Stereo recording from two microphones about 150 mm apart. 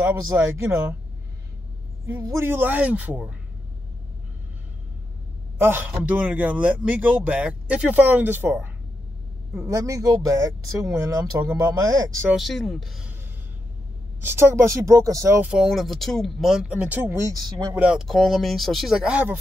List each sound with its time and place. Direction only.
2.0 s a man's voice: 15° right (ahead or behind)
5.6 s a man's voice: 15° right (ahead or behind)
12.3 s speech: centre (ahead or behind)
14.2 s speech: 15° right (ahead or behind)
15.5 s speech: centre (ahead or behind)